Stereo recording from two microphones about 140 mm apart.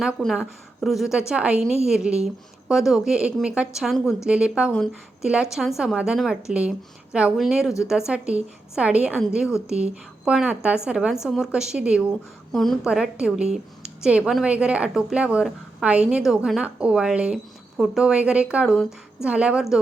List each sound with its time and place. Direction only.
0.0 s a woman's voice: centre (ahead or behind)